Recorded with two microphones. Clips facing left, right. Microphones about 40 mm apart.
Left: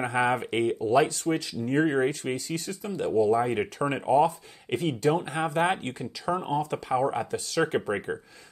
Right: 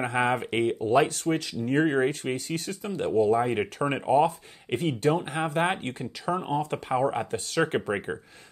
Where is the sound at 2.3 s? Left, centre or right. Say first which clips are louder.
Right 1 dB; right.